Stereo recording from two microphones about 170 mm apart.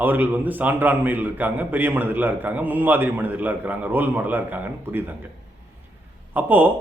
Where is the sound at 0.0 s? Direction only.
10° right (ahead or behind).